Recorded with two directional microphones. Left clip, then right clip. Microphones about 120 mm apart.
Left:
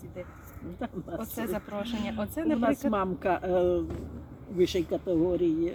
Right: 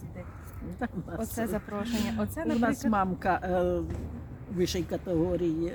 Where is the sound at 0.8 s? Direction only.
35° right (ahead or behind).